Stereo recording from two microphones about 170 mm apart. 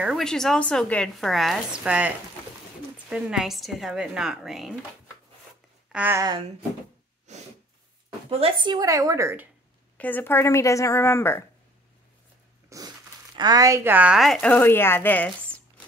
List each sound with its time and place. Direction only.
0.0 s speech: centre (ahead or behind)
5.9 s speech: 10° right (ahead or behind)
7.3 s snort: 45° right (ahead or behind)
8.3 s a woman's voice: 35° right (ahead or behind); by 9.5 s 15° right (ahead or behind)
9.9 s a woman's voice: 10° left (ahead or behind)
12.6 s a sound: 20° right (ahead or behind)
13.4 s speech: 20° right (ahead or behind); by 15.6 s 10° left (ahead or behind)